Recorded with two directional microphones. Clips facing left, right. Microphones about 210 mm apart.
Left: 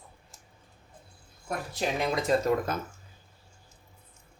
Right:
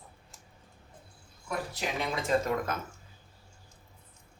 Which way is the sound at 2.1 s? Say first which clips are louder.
Left 2 dB; 40° left (ahead or behind).